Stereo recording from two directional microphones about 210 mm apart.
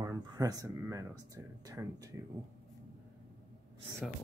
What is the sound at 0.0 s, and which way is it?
Speech, 15° right (ahead or behind).